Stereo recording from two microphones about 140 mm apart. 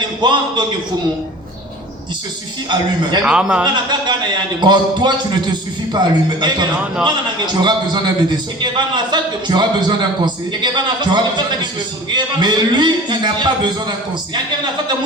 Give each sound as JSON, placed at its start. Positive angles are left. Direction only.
{"t": 0.2, "sound": "a man's voice", "side_deg": -35}
{"t": 3.2, "sound": "a man's voice", "side_deg": -5}
{"t": 3.6, "sound": "a man's voice", "side_deg": -30}